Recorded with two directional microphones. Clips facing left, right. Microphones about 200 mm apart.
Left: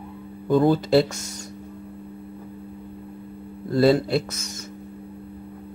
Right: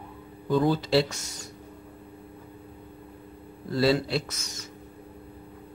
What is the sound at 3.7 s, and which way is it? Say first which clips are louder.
Speech: left 6 dB; 50° left (ahead or behind).